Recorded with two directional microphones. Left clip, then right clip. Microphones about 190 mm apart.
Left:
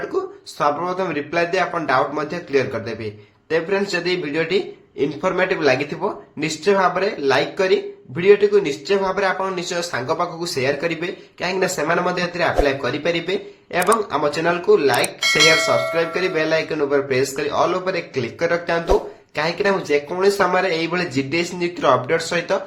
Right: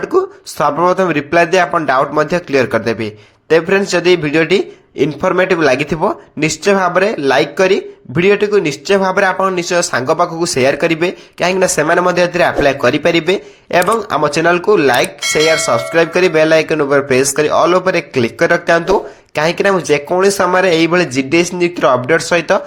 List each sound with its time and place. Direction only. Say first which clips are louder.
0.1 s a man's voice: right 13 dB; 40° right (ahead or behind)
15.2 s speech: right 2 dB; centre (ahead or behind)
15.9 s a man's voice: right 9 dB; 45° right (ahead or behind)